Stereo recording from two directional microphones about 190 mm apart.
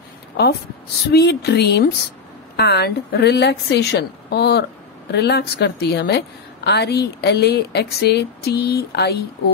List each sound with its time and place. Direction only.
1.1 s a woman's voice: 60° left (ahead or behind)